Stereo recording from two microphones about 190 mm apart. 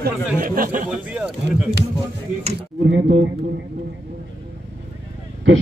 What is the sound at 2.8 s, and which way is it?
Speech, 70° right (ahead or behind).